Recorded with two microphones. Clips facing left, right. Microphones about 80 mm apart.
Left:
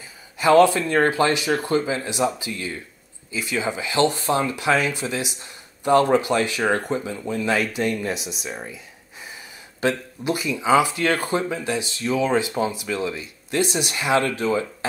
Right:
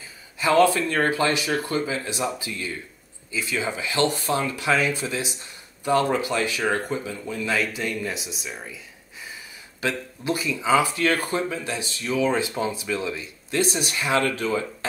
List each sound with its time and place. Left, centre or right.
0.4 s speech: left
2.0 s speech: centre
3.3 s speech: centre
9.8 s speech: left
13.1 s speech: centre